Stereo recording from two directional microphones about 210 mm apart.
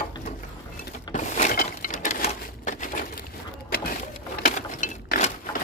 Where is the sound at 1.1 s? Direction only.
35° left (ahead or behind).